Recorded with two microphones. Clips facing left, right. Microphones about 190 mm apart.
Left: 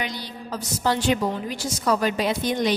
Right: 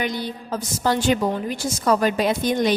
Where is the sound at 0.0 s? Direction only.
50° right (ahead or behind).